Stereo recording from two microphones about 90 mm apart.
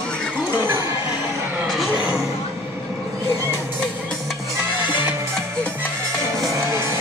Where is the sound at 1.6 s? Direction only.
Centre (ahead or behind).